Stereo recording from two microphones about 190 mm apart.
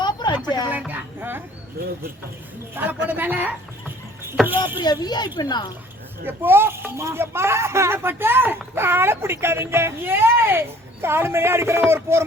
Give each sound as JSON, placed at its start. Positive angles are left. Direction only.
{"t": 0.0, "sound": "a sound", "side_deg": 25}
{"t": 0.7, "sound": "speech", "side_deg": -10}
{"t": 2.8, "sound": "speech", "side_deg": -10}
{"t": 3.1, "sound": "a sound", "side_deg": -10}
{"t": 4.4, "sound": "speech", "side_deg": -10}
{"t": 4.8, "sound": "speech", "side_deg": 20}
{"t": 6.2, "sound": "speech", "side_deg": -10}